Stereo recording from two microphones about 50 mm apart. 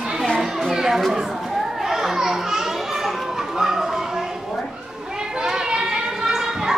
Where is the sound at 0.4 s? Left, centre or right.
Centre.